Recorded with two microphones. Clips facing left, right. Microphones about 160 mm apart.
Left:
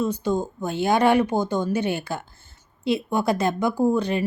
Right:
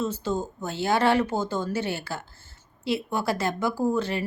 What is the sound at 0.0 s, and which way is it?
A woman's voice, 15° left (ahead or behind).